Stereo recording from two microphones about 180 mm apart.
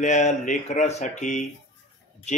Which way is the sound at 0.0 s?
40° left (ahead or behind).